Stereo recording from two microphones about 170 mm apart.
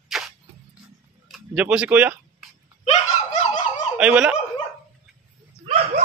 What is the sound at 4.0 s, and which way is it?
Speech, 5° right (ahead or behind).